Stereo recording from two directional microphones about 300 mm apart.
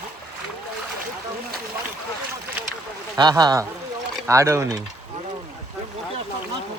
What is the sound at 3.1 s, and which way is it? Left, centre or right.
Speech, centre.